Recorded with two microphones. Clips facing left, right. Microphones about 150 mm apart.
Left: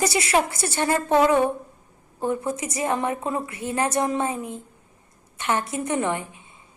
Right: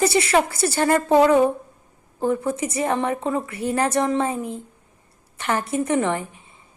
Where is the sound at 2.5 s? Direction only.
30° right (ahead or behind).